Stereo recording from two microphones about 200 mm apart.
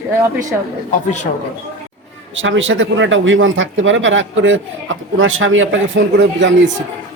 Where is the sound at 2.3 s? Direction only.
75° right (ahead or behind).